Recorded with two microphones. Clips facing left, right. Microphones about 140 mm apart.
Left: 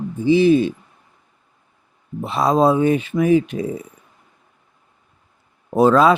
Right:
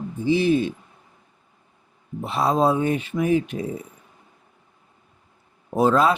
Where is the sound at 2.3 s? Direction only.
90° left.